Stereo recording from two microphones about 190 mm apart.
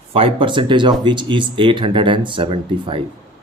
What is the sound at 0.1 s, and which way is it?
Speech, 30° right (ahead or behind).